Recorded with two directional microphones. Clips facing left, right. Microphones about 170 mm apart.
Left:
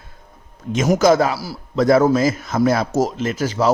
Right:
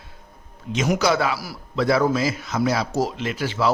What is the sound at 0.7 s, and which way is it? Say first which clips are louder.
A man's voice: left 6 dB; 45° left (ahead or behind).